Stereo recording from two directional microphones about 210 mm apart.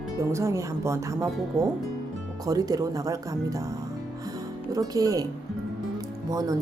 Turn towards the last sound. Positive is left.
turn(degrees=-15)  # may be behind; listen again after turning